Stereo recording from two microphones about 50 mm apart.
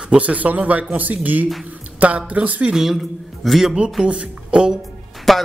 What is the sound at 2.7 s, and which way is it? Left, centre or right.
A man's voice, centre.